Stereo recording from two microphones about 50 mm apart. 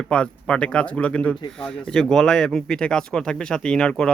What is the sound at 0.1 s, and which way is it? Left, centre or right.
Speech, centre.